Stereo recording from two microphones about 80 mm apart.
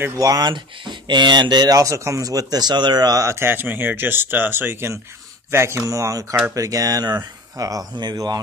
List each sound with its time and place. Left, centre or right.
0.2 s speech: right
0.5 s speech: right
1.8 s speech: right